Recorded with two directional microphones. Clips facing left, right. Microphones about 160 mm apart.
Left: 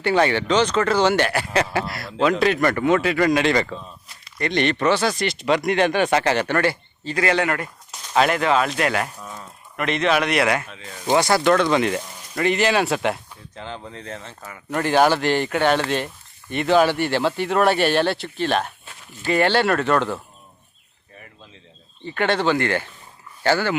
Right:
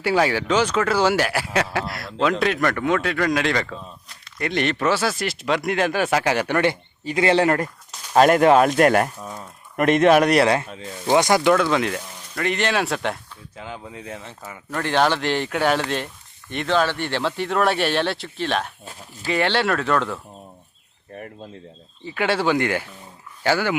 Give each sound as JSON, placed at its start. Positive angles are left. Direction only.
{"t": 0.0, "sound": "speech", "side_deg": -5}
{"t": 7.3, "sound": "a man's voice", "side_deg": -30}
{"t": 11.1, "sound": "speech", "side_deg": -15}
{"t": 11.5, "sound": "speech", "side_deg": 0}
{"t": 14.7, "sound": "speech", "side_deg": 10}
{"t": 21.2, "sound": "speech", "side_deg": -50}
{"t": 22.0, "sound": "speech", "side_deg": -5}